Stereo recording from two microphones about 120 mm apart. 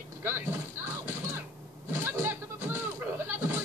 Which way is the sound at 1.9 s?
25° right (ahead or behind).